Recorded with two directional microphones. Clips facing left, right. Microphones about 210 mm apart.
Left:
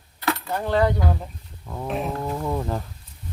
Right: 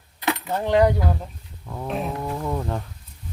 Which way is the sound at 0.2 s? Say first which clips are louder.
Right 1 dB; 20° right (ahead or behind).